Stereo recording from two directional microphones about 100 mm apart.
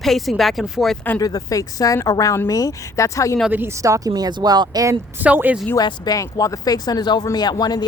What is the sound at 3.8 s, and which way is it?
Speech, 35° right (ahead or behind).